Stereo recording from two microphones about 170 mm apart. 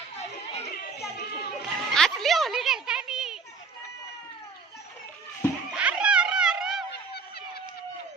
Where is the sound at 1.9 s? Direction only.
Centre (ahead or behind).